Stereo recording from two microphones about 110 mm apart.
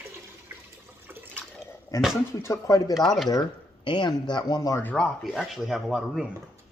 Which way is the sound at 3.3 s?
45° left (ahead or behind).